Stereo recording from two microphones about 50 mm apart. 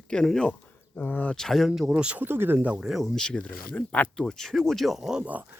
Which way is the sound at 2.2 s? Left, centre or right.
Right.